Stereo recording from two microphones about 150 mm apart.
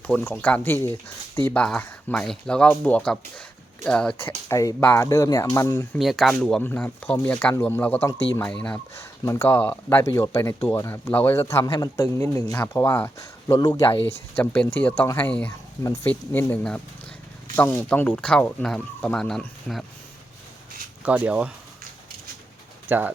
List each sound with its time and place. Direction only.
0.1 s speech: 10° left (ahead or behind)
4.4 s speech: 20° left (ahead or behind)
6.0 s speech: centre (ahead or behind)
9.0 s speech: 15° left (ahead or behind)
14.3 s speech: 10° left (ahead or behind)
21.0 s speech: 10° right (ahead or behind)
22.9 s speech: 10° right (ahead or behind)